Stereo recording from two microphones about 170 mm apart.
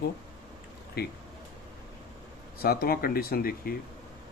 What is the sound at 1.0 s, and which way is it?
Speech, 65° left (ahead or behind).